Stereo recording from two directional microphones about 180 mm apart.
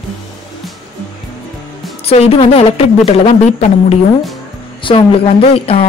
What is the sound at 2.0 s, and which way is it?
A woman's voice, 35° left (ahead or behind).